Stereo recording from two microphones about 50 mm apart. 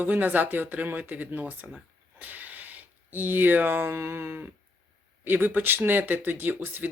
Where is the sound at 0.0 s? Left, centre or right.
Right.